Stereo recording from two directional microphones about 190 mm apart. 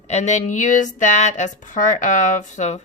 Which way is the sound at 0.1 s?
35° left (ahead or behind).